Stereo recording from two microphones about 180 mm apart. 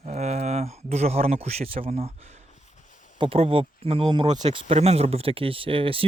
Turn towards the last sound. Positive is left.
turn(degrees=-30)  # may be behind; listen again after turning